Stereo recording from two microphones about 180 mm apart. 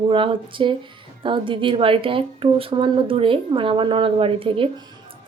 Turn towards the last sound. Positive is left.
turn(degrees=-30)  # may be behind; listen again after turning